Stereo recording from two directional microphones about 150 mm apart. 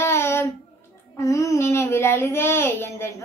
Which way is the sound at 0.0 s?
15° left (ahead or behind).